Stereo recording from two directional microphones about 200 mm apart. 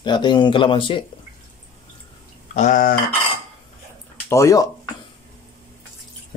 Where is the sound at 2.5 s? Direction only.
40° left (ahead or behind).